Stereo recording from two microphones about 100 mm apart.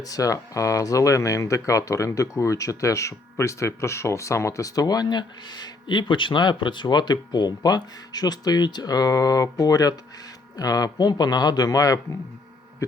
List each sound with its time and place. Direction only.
0.0 s speech: 35° left (ahead or behind)